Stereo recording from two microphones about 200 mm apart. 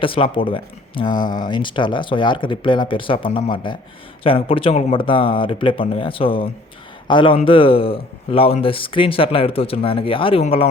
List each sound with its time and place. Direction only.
0.0 s speech: 25° left (ahead or behind)
1.1 s speech: 45° left (ahead or behind)
1.5 s a man's voice: 25° left (ahead or behind)